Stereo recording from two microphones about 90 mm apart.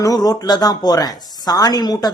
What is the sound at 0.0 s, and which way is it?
A man's voice, 45° left (ahead or behind).